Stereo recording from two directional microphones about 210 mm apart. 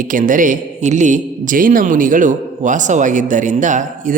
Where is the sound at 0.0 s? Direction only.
40° right (ahead or behind).